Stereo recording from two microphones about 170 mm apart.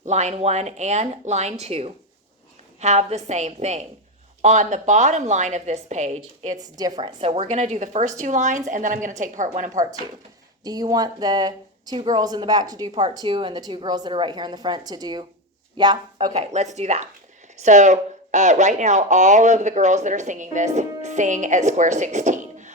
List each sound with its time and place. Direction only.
0.0 s speech: 40° right (ahead or behind)
6.6 s speech: 20° right (ahead or behind); by 9.8 s 45° right (ahead or behind)
10.6 s speech: 20° right (ahead or behind)
16.3 s speech: 40° right (ahead or behind)